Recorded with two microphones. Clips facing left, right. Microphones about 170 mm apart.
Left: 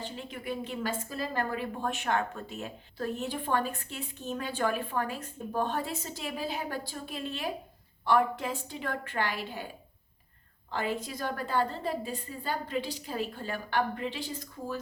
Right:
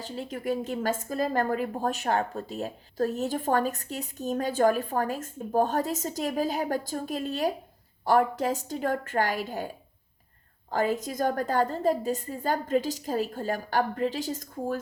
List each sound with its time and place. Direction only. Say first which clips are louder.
0.0 s a woman's voice: right 6 dB; 40° right (ahead or behind)
10.7 s a woman's voice: right 6 dB; 45° right (ahead or behind)